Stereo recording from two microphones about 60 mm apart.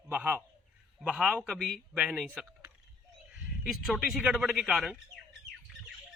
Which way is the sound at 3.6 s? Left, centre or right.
Centre.